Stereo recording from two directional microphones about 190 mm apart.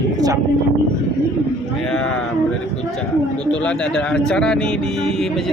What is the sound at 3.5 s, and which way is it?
Speech, 5° left (ahead or behind).